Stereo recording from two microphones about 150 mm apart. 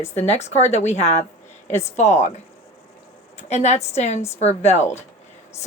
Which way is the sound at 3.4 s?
50° left (ahead or behind).